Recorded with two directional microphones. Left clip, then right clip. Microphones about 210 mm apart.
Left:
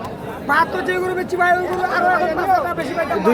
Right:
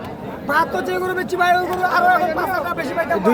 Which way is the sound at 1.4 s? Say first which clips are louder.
Even; 50° right (ahead or behind).